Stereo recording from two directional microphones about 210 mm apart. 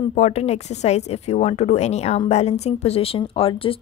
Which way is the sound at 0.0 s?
30° left (ahead or behind).